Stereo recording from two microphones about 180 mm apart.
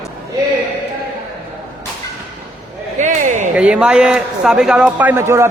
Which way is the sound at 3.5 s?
5° right (ahead or behind).